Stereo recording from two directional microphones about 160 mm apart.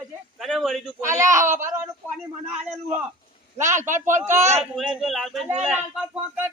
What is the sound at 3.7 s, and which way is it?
Speech, 50° right (ahead or behind).